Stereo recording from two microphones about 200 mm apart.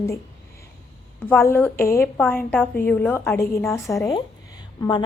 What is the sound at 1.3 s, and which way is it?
A woman's voice, 10° left (ahead or behind).